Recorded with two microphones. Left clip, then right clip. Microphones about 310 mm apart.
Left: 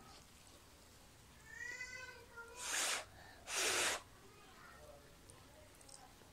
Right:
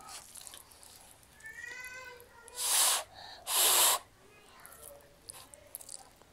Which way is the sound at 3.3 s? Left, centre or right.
Right.